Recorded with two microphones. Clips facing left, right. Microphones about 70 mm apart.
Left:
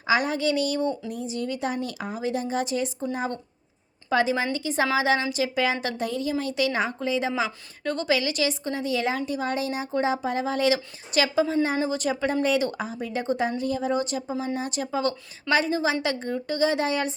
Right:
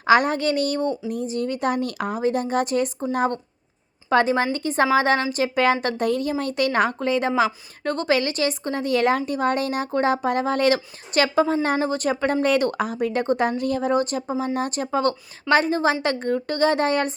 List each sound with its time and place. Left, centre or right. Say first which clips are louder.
0.0 s a woman's voice: right 5 dB; right